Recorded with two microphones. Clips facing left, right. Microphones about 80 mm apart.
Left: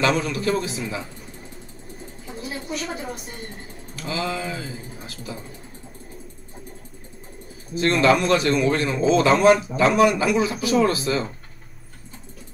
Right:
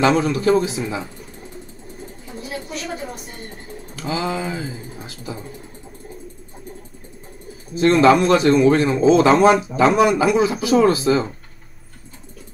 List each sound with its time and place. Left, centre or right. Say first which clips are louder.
0.0 s a man's voice: right 5 dB; right
2.4 s a sound: even; centre
3.9 s typing: right 3 dB; right
7.8 s a man's voice: right 5 dB; right